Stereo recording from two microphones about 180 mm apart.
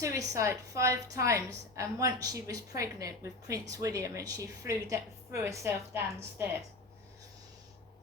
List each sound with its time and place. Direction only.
0.0 s a woman's voice: 15° right (ahead or behind)